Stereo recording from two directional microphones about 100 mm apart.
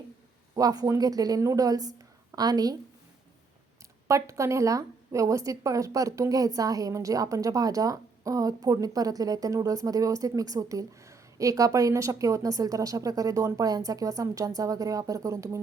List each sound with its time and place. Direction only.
0.5 s a woman's voice: 40° right (ahead or behind)
4.1 s a woman's voice: 30° right (ahead or behind)